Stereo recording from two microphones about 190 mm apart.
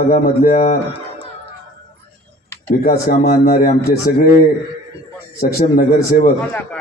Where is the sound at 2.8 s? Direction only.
50° left (ahead or behind).